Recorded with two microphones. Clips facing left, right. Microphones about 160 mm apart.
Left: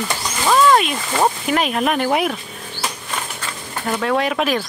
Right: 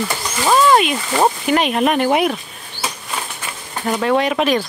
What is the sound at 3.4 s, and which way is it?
Speech, 10° right (ahead or behind).